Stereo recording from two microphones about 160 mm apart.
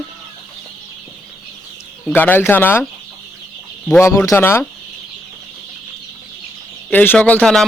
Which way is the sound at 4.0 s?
20° left (ahead or behind).